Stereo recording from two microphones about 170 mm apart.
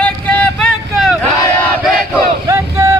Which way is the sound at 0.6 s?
Centre (ahead or behind).